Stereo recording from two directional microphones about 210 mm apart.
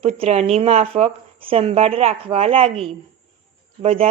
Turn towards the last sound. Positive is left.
turn(degrees=-30)  # may be behind; listen again after turning